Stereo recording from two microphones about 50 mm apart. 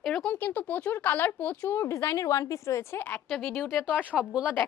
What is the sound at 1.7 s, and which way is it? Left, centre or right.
A woman's voice, left.